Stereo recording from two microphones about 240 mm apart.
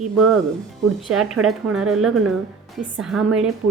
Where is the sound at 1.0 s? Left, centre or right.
Centre.